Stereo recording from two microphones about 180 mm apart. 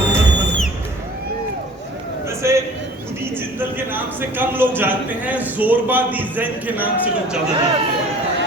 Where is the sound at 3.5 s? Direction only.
10° right (ahead or behind).